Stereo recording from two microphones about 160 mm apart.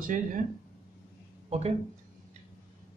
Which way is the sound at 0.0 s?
55° right (ahead or behind).